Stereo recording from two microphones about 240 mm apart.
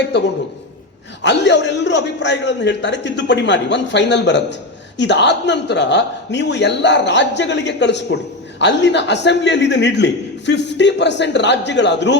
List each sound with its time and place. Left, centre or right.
1.2 s a man's voice: left